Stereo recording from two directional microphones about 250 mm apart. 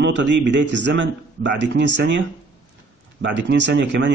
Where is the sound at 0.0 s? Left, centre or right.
Right.